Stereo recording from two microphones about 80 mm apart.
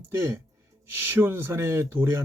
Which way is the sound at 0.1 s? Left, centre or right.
Right.